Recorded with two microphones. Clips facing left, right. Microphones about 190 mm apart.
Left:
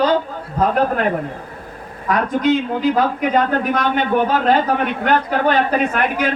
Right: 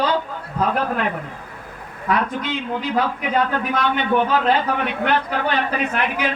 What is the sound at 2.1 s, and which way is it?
A man's voice, 45° left (ahead or behind).